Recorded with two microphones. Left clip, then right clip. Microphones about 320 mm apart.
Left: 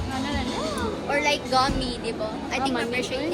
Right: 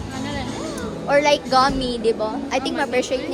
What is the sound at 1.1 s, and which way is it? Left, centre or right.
A woman's voice, right.